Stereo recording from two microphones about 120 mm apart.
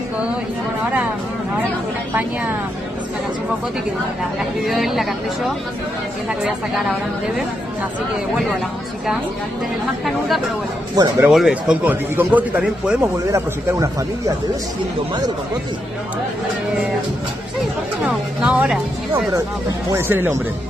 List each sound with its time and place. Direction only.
4.6 s a woman's voice: centre (ahead or behind)
6.4 s a woman's voice: centre (ahead or behind)
10.0 s a woman's voice: centre (ahead or behind)
13.0 s speech: 25° right (ahead or behind)
18.0 s a man's voice: 10° right (ahead or behind)
19.9 s speech: 20° right (ahead or behind)